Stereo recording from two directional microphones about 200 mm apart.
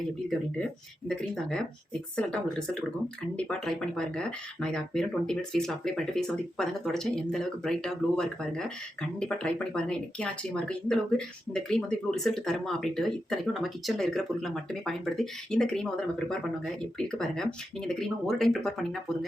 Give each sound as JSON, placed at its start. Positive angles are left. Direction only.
{"t": 1.0, "sound": "speech", "side_deg": 5}